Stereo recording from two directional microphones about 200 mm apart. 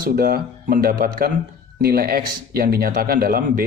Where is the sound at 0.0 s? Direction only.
50° right (ahead or behind).